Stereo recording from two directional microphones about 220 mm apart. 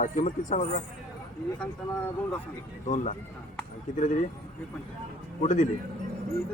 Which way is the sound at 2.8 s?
35° left (ahead or behind).